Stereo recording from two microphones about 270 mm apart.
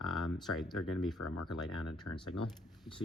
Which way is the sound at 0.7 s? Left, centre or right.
Left.